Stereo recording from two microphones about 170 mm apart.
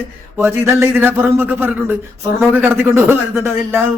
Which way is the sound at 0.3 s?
15° right (ahead or behind).